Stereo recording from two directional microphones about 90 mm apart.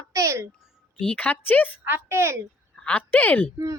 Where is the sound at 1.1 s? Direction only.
20° left (ahead or behind).